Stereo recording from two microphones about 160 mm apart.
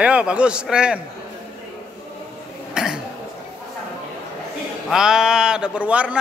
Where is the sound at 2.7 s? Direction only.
5° right (ahead or behind).